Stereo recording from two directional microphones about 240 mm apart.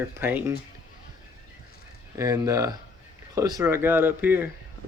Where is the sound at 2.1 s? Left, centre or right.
Centre.